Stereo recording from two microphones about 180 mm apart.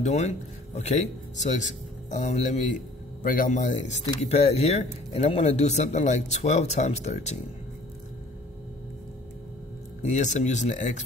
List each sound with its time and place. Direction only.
0.0 s a man's voice: 40° left (ahead or behind)
10.0 s a man's voice: 40° left (ahead or behind)